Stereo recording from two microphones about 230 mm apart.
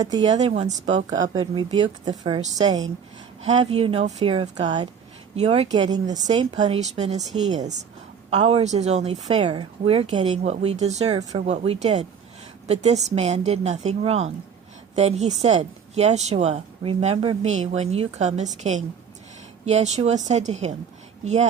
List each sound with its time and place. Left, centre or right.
0.3 s a woman's voice: right
1.2 s a woman's voice: centre
6.3 s a woman's voice: right